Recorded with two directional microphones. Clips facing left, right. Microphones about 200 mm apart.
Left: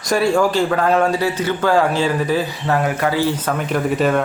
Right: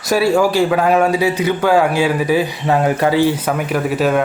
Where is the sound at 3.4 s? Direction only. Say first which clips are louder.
Right 2 dB; 5° right (ahead or behind).